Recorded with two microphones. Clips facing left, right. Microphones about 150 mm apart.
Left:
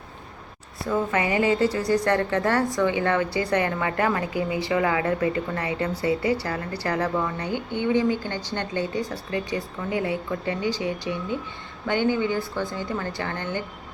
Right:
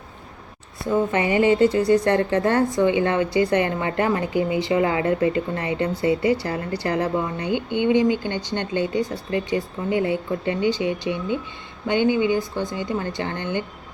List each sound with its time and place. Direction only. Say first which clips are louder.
0.9 s a woman's voice: right 3 dB; 25° right (ahead or behind)